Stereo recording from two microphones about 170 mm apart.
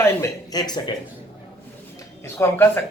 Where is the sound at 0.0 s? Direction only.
20° left (ahead or behind).